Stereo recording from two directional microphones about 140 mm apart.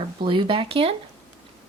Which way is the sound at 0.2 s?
40° right (ahead or behind).